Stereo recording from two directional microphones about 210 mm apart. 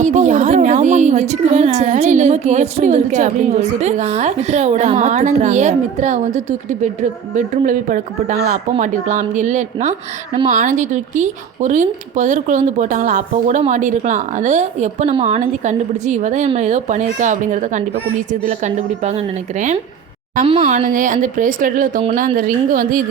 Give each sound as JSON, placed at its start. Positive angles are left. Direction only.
{"t": 0.0, "sound": "speech", "side_deg": -35}